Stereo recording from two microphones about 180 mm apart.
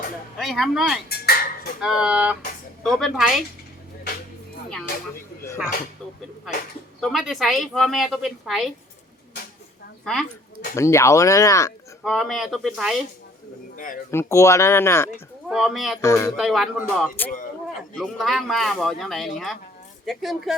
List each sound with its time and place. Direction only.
0.3 s a woman's voice: centre (ahead or behind)
1.2 s a sound: 55° left (ahead or behind)
1.8 s a woman's voice: 5° right (ahead or behind)
7.0 s a woman's voice: centre (ahead or behind)
10.0 s a woman's voice: centre (ahead or behind)
10.8 s speech: 15° left (ahead or behind)
12.0 s a woman's voice: centre (ahead or behind)
13.7 s speech: 45° left (ahead or behind)
14.1 s speech: 15° left (ahead or behind)
15.4 s a woman's voice: centre (ahead or behind)
16.0 s speech: 15° left (ahead or behind)
16.4 s a woman's voice: centre (ahead or behind)